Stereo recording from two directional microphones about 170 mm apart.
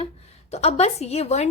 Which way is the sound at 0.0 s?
40° left (ahead or behind).